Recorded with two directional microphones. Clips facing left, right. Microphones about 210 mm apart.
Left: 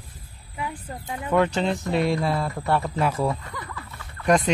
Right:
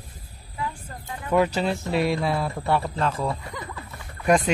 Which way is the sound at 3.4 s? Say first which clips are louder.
Right 1 dB; 20° right (ahead or behind).